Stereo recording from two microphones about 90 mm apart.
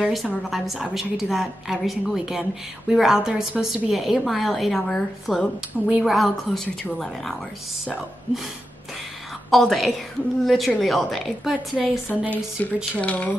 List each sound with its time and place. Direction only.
0.0 s a woman's voice: centre (ahead or behind)
9.5 s a woman's voice: centre (ahead or behind)
12.6 s speech: 20° left (ahead or behind)